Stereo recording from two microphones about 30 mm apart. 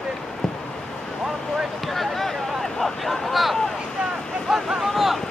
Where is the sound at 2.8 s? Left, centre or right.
Centre.